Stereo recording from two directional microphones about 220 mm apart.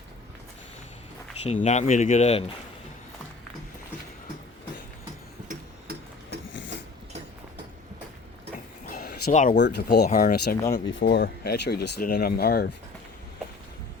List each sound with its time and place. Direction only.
1.6 s speech: 30° left (ahead or behind)
5.5 s tick-tock: 45° right (ahead or behind)
8.9 s a sound: 40° left (ahead or behind)
9.6 s speech: 50° left (ahead or behind)